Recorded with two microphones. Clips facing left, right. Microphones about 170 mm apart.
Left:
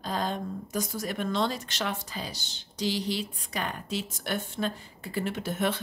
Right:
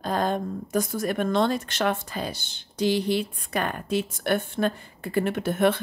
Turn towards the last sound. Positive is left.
turn(degrees=-55)  # may be behind; listen again after turning